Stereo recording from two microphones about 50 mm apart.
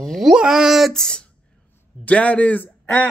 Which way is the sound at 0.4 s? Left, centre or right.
Centre.